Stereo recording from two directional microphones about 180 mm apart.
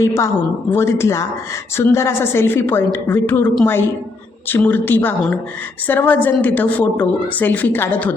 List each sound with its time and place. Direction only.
0.0 s a woman's voice: 15° left (ahead or behind)